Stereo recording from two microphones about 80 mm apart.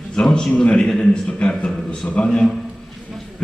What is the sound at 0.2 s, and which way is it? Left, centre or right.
A man's voice, centre.